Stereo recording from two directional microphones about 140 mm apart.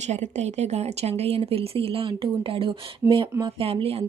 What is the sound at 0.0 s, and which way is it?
A woman's voice, 55° right (ahead or behind).